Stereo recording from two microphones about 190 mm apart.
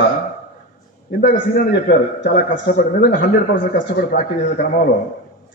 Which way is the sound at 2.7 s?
45° left (ahead or behind).